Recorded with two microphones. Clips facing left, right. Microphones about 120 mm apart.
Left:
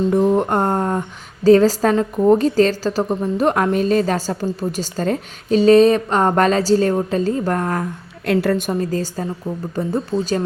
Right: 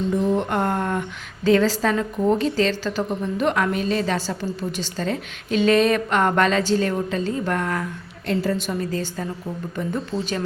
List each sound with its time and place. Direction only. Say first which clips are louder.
0.1 s a woman's voice: left 3 dB; 45° left (ahead or behind)
8.3 s a woman's voice: left 5 dB; 65° left (ahead or behind); by 10.4 s 40° left (ahead or behind)